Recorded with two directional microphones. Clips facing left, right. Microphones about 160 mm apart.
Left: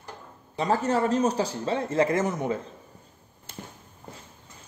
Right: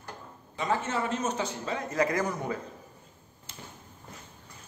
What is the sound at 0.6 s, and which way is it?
A man's voice, 35° left (ahead or behind).